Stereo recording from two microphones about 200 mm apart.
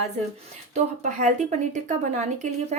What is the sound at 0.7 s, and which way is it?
Speech, 35° right (ahead or behind).